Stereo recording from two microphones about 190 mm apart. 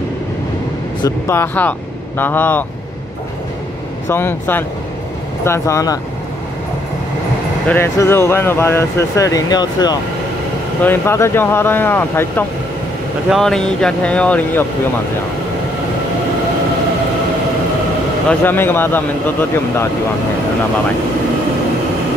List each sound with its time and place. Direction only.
1.0 s speech: 15° left (ahead or behind)
4.1 s speech: 10° left (ahead or behind)
7.6 s speech: 10° left (ahead or behind)
18.3 s speech: 10° left (ahead or behind)